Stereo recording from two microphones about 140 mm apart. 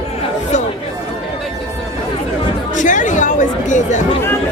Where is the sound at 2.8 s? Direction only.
65° left (ahead or behind).